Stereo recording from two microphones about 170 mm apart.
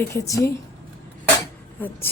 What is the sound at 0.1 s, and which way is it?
Speech, 15° left (ahead or behind).